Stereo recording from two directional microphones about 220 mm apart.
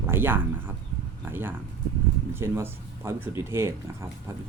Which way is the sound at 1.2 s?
10° right (ahead or behind).